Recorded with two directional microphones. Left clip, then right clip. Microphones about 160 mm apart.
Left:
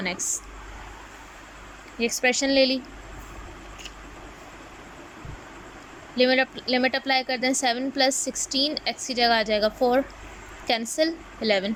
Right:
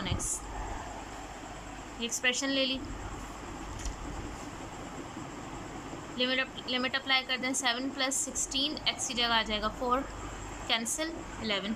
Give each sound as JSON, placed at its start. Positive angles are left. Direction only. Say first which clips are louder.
{"t": 0.0, "sound": "a sound", "louder": "left 7 dB", "side_deg": 25}
{"t": 2.0, "sound": "speech", "louder": "left 8 dB", "side_deg": 30}
{"t": 6.1, "sound": "a woman's voice", "louder": "left 10 dB", "side_deg": 30}